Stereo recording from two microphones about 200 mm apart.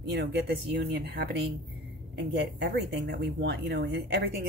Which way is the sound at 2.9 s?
55° right (ahead or behind).